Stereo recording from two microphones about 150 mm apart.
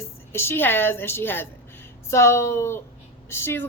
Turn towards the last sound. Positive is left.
turn(degrees=15)  # may be behind; listen again after turning